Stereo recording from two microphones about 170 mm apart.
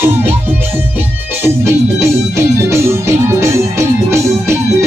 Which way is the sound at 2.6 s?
15° right (ahead or behind).